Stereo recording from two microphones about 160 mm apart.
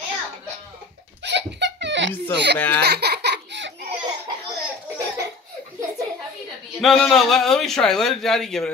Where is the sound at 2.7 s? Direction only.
90° right.